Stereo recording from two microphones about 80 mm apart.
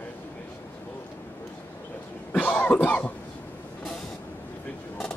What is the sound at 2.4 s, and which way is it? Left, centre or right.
Cough, centre.